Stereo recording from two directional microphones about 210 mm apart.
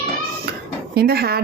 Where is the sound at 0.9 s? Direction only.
50° right (ahead or behind).